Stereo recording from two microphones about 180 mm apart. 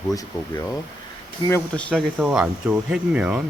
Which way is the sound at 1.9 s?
5° right (ahead or behind).